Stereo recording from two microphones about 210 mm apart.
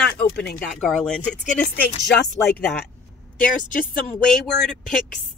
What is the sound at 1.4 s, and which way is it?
Speech, 35° left (ahead or behind).